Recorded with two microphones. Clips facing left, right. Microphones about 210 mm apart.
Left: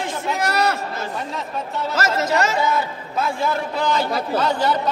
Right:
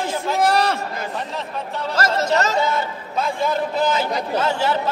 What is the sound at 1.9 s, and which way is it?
Speech, 5° left (ahead or behind).